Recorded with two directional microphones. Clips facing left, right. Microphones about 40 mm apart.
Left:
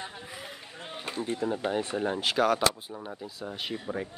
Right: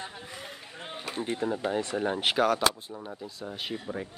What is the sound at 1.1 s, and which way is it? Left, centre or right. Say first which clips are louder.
Speech: even; right.